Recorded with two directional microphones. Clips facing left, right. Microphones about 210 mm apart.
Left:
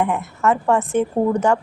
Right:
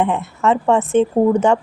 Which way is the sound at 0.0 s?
25° right (ahead or behind).